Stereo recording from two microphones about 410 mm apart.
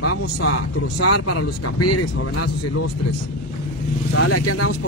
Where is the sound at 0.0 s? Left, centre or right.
Left.